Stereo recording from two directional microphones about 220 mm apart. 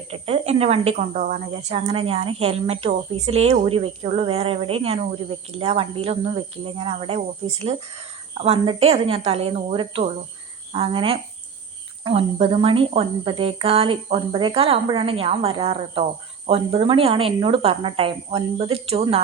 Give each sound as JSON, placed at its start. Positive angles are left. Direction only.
{"t": 0.1, "sound": "a woman's voice", "side_deg": -25}